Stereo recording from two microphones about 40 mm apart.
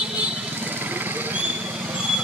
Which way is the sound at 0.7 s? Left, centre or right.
Right.